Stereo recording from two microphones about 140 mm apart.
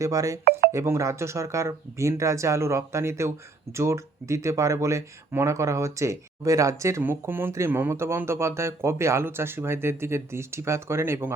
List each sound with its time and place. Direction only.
0.0 s speech: 25° right (ahead or behind)